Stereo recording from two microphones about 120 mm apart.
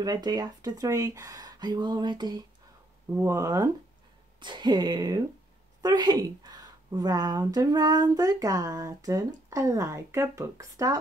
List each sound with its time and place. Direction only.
0.0 s a woman's voice: 35° right (ahead or behind)
3.1 s a woman's voice: 20° right (ahead or behind)